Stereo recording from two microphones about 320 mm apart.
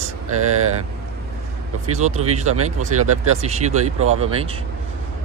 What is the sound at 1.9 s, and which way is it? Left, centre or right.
Speech, right.